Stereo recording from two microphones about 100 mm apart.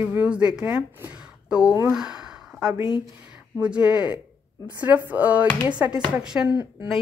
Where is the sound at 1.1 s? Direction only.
10° right (ahead or behind).